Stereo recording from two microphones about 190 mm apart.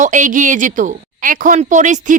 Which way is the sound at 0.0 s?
40° right (ahead or behind).